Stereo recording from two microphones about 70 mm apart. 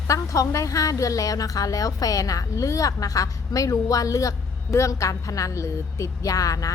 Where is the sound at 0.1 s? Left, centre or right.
Left.